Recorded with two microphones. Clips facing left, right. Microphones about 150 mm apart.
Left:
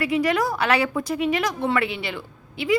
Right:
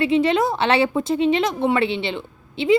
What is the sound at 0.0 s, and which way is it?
A woman's voice, 25° right (ahead or behind).